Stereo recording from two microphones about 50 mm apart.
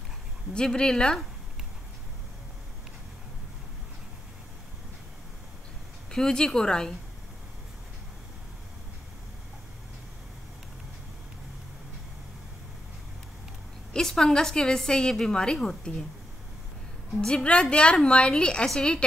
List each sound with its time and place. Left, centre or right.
0.6 s a woman's voice: centre
6.1 s a woman's voice: centre
13.9 s a woman's voice: centre
17.2 s a woman's voice: centre